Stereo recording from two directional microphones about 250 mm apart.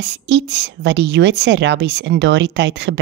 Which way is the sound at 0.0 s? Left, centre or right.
Right.